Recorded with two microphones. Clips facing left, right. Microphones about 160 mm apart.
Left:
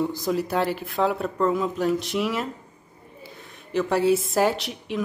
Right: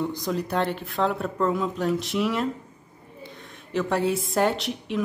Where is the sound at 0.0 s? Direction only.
5° left (ahead or behind).